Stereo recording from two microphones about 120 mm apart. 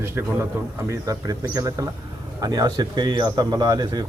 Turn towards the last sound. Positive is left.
turn(degrees=-35)  # may be behind; listen again after turning